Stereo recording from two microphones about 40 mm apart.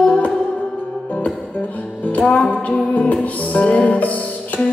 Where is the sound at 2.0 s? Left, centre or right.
Left.